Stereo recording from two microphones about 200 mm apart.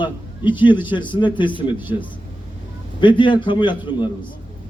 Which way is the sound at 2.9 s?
25° left (ahead or behind).